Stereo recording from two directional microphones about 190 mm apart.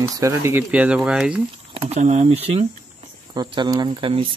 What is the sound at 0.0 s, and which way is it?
Speech, 15° right (ahead or behind).